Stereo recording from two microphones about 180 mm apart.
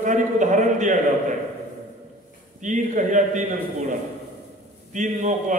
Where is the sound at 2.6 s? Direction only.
45° right (ahead or behind).